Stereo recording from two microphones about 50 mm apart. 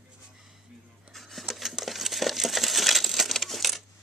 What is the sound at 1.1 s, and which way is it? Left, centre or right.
Crumpling, centre.